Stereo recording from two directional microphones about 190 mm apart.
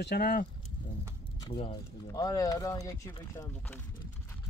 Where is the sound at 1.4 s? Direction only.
25° left (ahead or behind).